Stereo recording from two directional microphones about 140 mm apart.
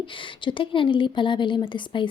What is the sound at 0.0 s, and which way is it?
Speech, 35° left (ahead or behind).